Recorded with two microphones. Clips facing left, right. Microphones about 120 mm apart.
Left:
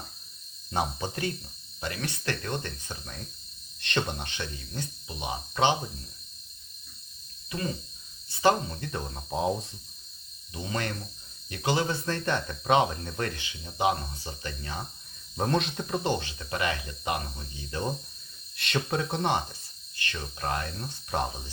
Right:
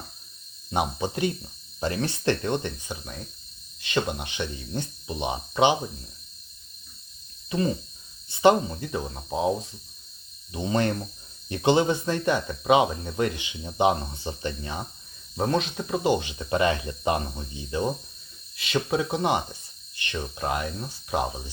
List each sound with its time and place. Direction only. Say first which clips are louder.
0.7 s speech: right 4 dB; 15° right (ahead or behind)
1.8 s speech: right 8 dB; 30° right (ahead or behind)
4.7 s speech: right 6 dB; 25° right (ahead or behind)
8.3 s speech: right 5 dB; 20° right (ahead or behind)
8.7 s speech: right 4 dB; 5° right (ahead or behind)
10.5 s speech: right 8 dB; 25° right (ahead or behind)
15.4 s speech: right 2 dB; centre (ahead or behind)
18.5 s speech: right 4 dB; centre (ahead or behind)